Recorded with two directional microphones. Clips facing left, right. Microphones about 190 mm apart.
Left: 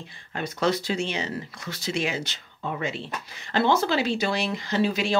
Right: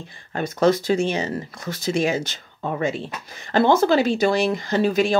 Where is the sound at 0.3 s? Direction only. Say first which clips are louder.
Right 6 dB; 45° right (ahead or behind).